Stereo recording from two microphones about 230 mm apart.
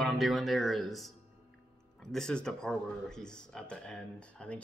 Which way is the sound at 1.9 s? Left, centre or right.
Centre.